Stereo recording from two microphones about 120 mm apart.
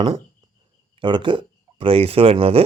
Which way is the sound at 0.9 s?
40° right (ahead or behind).